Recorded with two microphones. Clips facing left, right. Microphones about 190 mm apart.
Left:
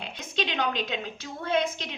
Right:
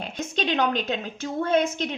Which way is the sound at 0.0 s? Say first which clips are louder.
Right 4 dB; 45° right (ahead or behind).